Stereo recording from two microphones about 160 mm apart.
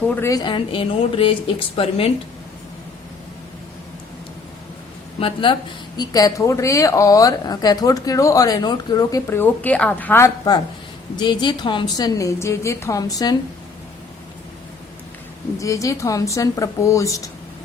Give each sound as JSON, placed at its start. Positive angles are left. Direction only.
{"t": 0.1, "sound": "speech", "side_deg": 15}
{"t": 5.2, "sound": "speech", "side_deg": 30}
{"t": 15.5, "sound": "speech", "side_deg": 20}